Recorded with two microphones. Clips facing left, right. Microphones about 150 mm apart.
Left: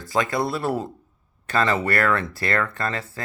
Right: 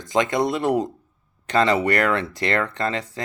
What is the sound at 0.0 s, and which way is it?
Speech, 20° right (ahead or behind).